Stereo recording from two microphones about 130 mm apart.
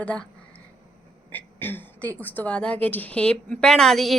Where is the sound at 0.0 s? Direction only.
10° left (ahead or behind).